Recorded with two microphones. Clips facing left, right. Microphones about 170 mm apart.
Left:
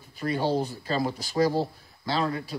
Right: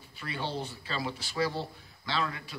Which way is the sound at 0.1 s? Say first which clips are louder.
Left 10 dB; 40° left (ahead or behind).